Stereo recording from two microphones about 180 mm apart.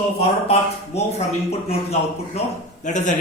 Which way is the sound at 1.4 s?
35° left (ahead or behind).